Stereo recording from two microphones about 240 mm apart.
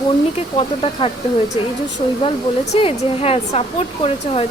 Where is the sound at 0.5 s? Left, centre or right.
Left.